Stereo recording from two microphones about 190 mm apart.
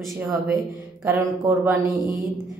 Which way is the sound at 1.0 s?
15° right (ahead or behind).